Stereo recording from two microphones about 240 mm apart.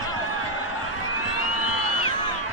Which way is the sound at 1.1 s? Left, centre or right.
Left.